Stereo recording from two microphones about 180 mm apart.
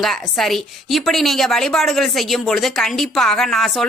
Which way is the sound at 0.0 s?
Centre (ahead or behind).